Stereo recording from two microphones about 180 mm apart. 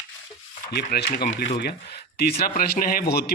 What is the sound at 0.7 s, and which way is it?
A man's voice, 60° left (ahead or behind).